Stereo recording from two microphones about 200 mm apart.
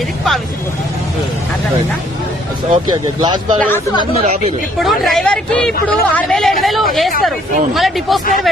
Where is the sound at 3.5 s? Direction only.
10° left (ahead or behind).